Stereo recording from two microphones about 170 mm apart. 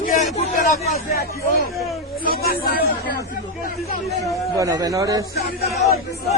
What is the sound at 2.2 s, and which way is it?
Speech, 60° left (ahead or behind).